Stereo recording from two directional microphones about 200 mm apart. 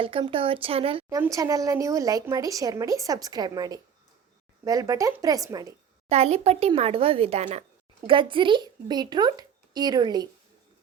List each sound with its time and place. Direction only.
0.0 s speech: 25° right (ahead or behind)
1.2 s speech: 15° right (ahead or behind)
6.1 s speech: 30° right (ahead or behind)